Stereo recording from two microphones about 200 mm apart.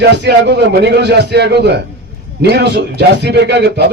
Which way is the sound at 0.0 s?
60° right (ahead or behind).